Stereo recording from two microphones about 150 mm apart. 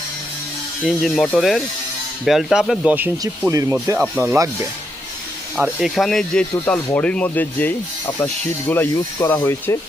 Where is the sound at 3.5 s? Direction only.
20° right (ahead or behind).